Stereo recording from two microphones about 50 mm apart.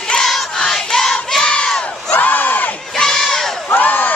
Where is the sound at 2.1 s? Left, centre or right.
Left.